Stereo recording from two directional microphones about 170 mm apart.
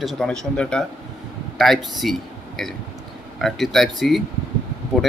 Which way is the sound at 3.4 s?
Centre (ahead or behind).